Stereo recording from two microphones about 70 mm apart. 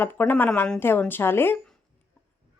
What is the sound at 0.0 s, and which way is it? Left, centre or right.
A woman's voice, left.